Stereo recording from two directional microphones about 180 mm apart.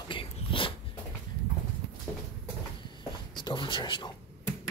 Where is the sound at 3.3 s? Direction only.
25° left (ahead or behind).